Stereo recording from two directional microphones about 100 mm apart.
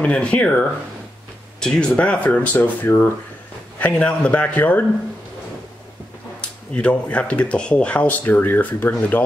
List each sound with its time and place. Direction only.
0.0 s speech: 10° left (ahead or behind)
6.7 s speech: 15° left (ahead or behind)